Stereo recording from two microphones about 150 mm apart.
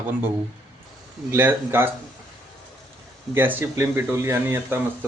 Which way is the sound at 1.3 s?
15° right (ahead or behind).